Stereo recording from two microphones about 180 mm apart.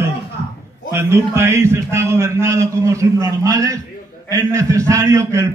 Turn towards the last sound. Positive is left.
turn(degrees=-15)  # may be behind; listen again after turning